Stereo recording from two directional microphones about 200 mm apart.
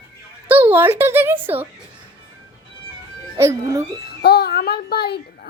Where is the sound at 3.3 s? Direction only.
15° right (ahead or behind).